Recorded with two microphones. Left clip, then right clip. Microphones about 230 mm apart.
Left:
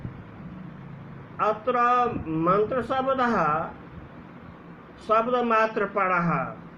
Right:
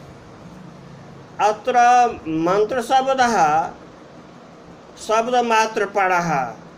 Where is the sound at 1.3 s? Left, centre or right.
Centre.